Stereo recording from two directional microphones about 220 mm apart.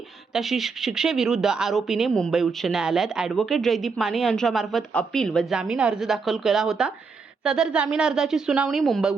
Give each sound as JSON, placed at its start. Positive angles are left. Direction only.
{"t": 0.3, "sound": "speech", "side_deg": 0}